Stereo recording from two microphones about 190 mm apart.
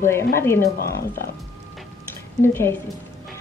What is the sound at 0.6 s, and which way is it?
Speech, 55° left (ahead or behind).